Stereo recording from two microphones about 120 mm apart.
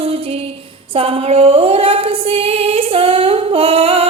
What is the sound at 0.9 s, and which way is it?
Female singing, 55° right (ahead or behind).